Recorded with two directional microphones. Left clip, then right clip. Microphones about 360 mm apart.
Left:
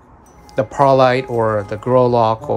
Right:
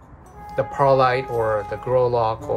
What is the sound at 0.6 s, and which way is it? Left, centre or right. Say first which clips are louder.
Speech: left 5 dB; left.